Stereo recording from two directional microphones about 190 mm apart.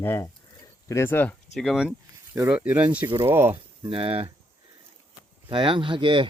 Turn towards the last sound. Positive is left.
turn(degrees=-25)  # may be behind; listen again after turning